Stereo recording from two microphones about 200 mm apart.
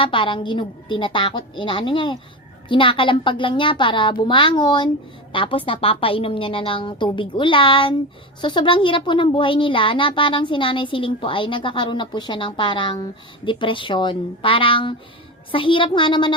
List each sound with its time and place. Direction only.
0.0 s speech: 25° left (ahead or behind)